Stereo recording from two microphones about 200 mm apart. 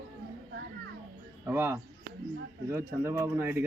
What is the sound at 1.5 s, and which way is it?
A man's voice, 10° right (ahead or behind).